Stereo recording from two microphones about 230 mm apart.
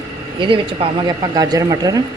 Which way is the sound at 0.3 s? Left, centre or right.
Right.